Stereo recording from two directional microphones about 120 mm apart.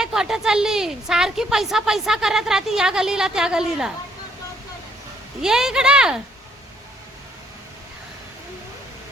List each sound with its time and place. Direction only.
0.0 s a woman's voice: 5° right (ahead or behind)
5.4 s a woman's voice: 5° right (ahead or behind)